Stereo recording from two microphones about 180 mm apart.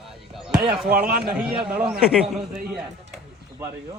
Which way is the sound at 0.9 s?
55° right (ahead or behind).